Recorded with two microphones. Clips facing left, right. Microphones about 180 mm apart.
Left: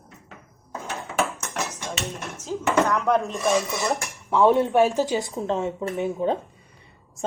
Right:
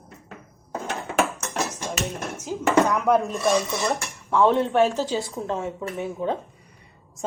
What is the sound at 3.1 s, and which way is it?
Speech, centre (ahead or behind).